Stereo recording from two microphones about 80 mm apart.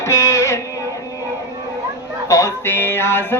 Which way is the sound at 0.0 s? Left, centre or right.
Left.